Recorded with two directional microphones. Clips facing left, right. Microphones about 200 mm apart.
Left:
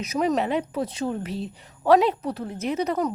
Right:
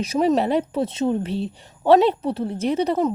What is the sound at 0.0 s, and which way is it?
Speech, 30° right (ahead or behind).